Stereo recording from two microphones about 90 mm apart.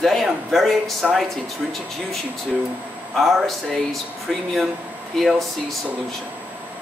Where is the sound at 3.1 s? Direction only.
Centre (ahead or behind).